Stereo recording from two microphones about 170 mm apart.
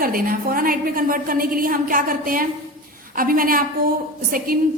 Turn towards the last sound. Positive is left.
turn(degrees=-60)  # may be behind; listen again after turning